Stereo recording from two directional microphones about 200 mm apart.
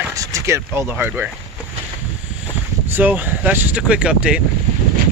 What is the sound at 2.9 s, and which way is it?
Speech, 10° right (ahead or behind).